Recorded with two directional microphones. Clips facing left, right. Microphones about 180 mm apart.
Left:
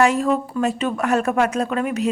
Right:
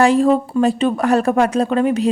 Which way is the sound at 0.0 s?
30° right (ahead or behind).